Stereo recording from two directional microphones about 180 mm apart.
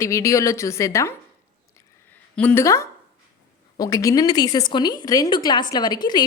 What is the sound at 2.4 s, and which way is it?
A woman's voice, 10° left (ahead or behind).